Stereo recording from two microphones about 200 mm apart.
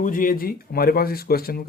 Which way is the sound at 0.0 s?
45° left (ahead or behind).